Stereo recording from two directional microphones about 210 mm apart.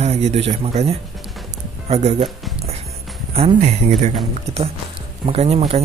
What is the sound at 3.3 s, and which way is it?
Speech, 30° right (ahead or behind).